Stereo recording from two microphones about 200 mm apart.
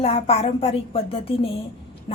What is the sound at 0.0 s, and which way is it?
A woman's voice, 30° left (ahead or behind).